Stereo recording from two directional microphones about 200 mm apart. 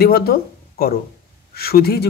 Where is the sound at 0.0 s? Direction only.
50° left (ahead or behind).